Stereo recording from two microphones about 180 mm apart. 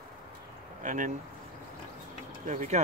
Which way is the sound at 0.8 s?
45° right (ahead or behind).